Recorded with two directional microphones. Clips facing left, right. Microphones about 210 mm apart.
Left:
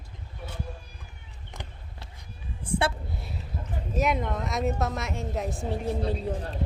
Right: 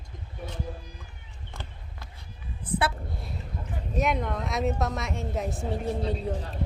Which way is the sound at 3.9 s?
Centre (ahead or behind).